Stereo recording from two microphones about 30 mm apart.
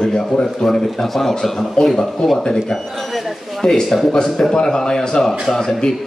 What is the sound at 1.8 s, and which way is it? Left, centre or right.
A man's voice, left.